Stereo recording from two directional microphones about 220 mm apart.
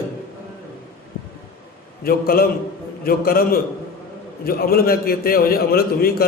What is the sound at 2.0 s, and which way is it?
A man's voice, 40° left (ahead or behind).